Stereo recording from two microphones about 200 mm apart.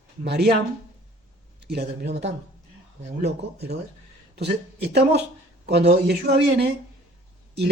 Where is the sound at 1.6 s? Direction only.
55° right (ahead or behind).